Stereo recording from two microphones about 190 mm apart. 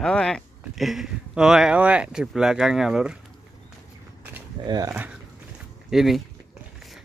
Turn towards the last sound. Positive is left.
turn(degrees=0)  # may be behind; listen again after turning